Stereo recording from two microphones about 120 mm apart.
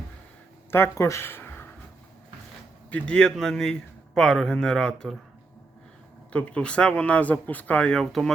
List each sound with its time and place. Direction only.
0.7 s speech: 25° left (ahead or behind)
2.9 s a man's voice: 10° left (ahead or behind)
6.3 s speech: 10° left (ahead or behind)